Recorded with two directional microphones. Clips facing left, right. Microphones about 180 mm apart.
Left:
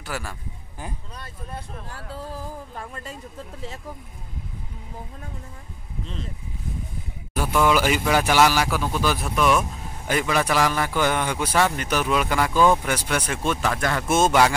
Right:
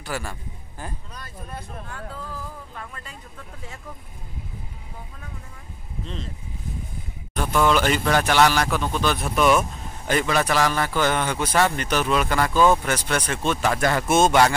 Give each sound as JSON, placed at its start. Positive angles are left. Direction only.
{"t": 0.0, "sound": "speech", "side_deg": 0}
{"t": 1.1, "sound": "speech", "side_deg": 30}
{"t": 7.3, "sound": "speech", "side_deg": 5}
{"t": 13.7, "sound": "speech", "side_deg": -10}
{"t": 14.1, "sound": "a man's voice", "side_deg": 5}